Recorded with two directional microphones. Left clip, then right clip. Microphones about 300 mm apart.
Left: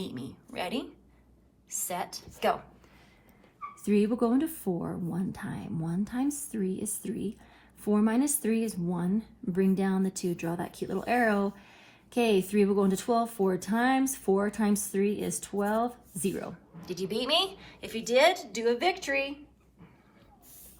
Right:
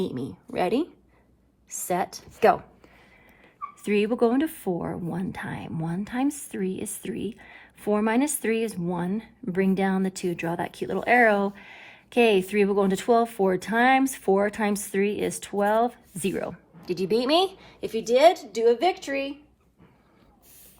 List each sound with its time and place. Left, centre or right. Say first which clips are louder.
0.1 s speech: right 8 dB; right
3.8 s a woman's voice: right 5 dB; right; by 19.4 s centre